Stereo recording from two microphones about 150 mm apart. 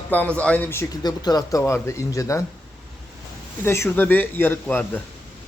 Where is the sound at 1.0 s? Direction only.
25° left (ahead or behind).